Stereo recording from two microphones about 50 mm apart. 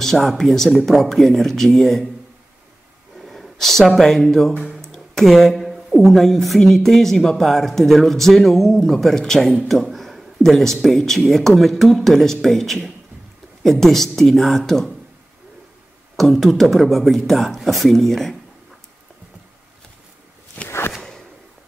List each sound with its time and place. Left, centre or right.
0.0 s speech: centre
3.2 s a sound: centre
4.0 s speech: centre
4.7 s a sound: centre
5.9 s speech: centre
16.2 s speech: centre
20.6 s walk: left